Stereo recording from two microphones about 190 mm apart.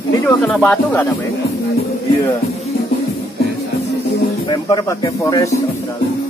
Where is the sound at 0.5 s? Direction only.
5° left (ahead or behind).